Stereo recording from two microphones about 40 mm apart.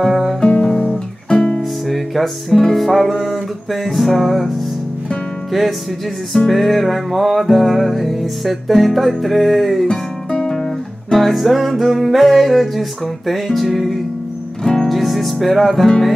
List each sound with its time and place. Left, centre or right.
0.0 s music: centre
0.4 s guitar: left
1.9 s music: centre
9.8 s music: centre
10.5 s guitar: centre
11.1 s music: centre
14.6 s music: centre
14.9 s music: centre